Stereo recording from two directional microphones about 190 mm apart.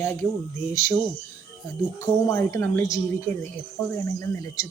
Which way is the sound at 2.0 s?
15° left (ahead or behind).